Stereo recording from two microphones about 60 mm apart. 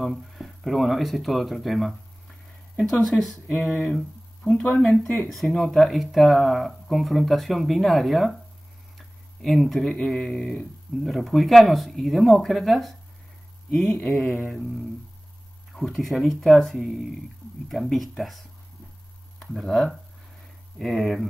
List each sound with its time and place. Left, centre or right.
0.0 s speech: centre
4.5 s speech: centre
4.7 s speech: centre
8.9 s a sound: centre
10.0 s speech: centre
11.1 s speech: centre
13.9 s speech: centre
19.4 s speech: centre